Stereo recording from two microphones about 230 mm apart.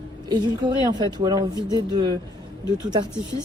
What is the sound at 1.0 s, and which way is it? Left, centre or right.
Speech, centre.